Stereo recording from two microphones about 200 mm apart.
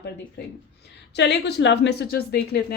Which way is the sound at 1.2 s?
60° left (ahead or behind).